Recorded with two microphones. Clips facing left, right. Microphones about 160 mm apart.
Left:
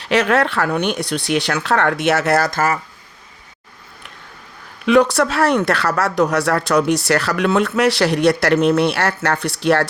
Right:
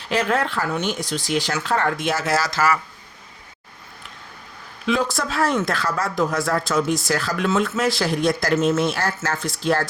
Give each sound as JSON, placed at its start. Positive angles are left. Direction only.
{"t": 0.0, "sound": "speech", "side_deg": 80}
{"t": 4.9, "sound": "speech", "side_deg": 70}